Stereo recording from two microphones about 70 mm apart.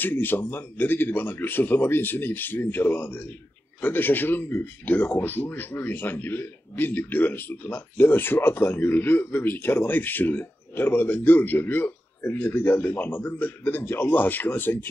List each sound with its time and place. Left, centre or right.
0.0 s a man's voice: left